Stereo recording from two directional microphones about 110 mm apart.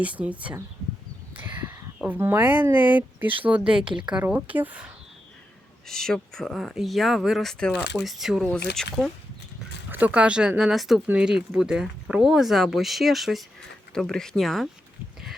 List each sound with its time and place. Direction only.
0.0 s speech: 15° right (ahead or behind)
1.4 s a sound: 15° right (ahead or behind)
2.6 s speech: 15° right (ahead or behind)
5.9 s speech: 5° left (ahead or behind)
8.2 s speech: 5° right (ahead or behind)
9.9 s speech: 15° right (ahead or behind)